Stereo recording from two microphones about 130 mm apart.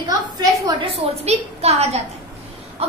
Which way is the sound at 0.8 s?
50° right (ahead or behind).